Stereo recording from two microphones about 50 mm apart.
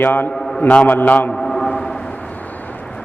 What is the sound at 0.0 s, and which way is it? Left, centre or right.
A man's voice, left.